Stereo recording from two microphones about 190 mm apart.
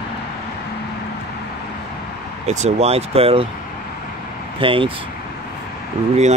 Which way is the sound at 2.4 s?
35° right (ahead or behind).